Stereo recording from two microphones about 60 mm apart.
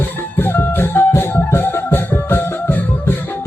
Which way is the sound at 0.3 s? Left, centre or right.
Left.